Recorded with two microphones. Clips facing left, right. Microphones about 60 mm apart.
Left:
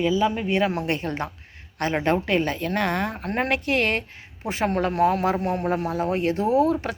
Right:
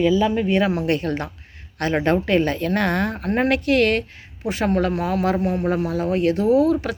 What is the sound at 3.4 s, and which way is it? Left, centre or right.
A woman's voice, left.